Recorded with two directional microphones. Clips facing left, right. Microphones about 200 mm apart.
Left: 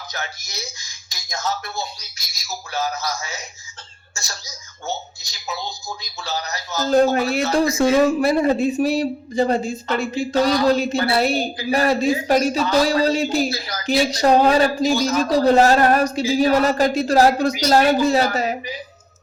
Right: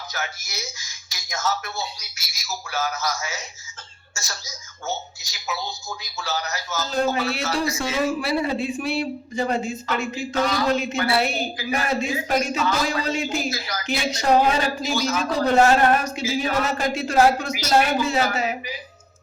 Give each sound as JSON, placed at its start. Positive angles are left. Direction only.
{"t": 0.1, "sound": "a man's voice", "side_deg": 35}
{"t": 5.5, "sound": "a man's voice", "side_deg": 35}
{"t": 7.1, "sound": "a man's voice", "side_deg": 50}